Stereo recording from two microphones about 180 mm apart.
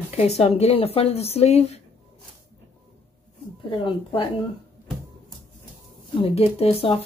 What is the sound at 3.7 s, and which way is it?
Speech, 25° left (ahead or behind).